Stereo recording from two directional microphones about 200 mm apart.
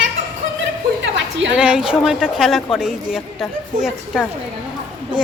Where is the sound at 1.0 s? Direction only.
65° right (ahead or behind).